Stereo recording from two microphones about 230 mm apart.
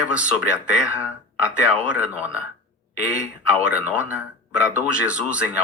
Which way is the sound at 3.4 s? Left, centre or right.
Centre.